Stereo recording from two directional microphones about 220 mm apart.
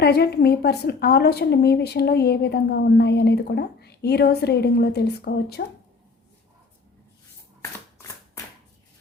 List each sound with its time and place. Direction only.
0.0 s a woman's voice: 45° left (ahead or behind)
7.6 s shuffling cards: 15° left (ahead or behind)